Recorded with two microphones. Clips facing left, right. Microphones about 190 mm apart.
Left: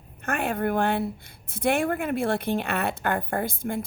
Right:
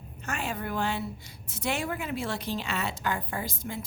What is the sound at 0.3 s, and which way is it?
A woman's voice, 55° left (ahead or behind).